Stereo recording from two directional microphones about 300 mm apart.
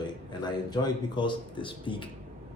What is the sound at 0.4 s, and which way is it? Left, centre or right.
Speech, centre.